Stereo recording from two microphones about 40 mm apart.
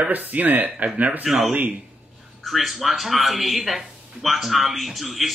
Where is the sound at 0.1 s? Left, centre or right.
Right.